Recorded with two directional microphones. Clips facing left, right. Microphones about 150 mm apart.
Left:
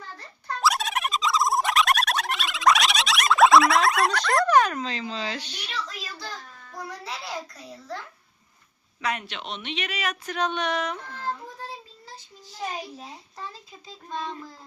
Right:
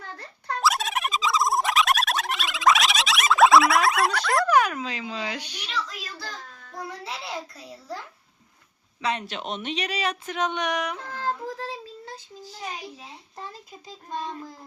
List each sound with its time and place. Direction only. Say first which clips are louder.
0.6 s a sound: even; centre (ahead or behind)
6.7 s a child's voice: right 1 dB; centre (ahead or behind)
9.0 s speech: right 2 dB; 30° right (ahead or behind)
9.2 s speech: right 4 dB; 45° right (ahead or behind)
10.2 s speech: left 4 dB; 20° right (ahead or behind)
11.1 s child singing: right 3 dB; 90° right
13.3 s child singing: even; 15° right (ahead or behind)